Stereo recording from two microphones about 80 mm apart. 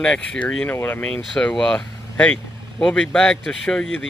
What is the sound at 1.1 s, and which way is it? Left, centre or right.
Speech, centre.